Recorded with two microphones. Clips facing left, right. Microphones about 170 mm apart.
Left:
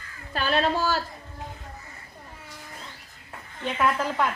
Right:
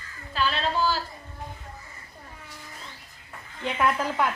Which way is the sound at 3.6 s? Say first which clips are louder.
Even; 10° right (ahead or behind).